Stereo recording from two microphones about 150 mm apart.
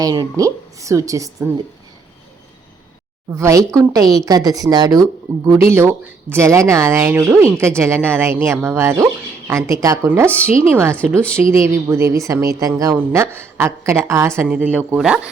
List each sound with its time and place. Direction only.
0.0 s a woman's voice: 25° right (ahead or behind)
3.3 s a woman's voice: 20° right (ahead or behind)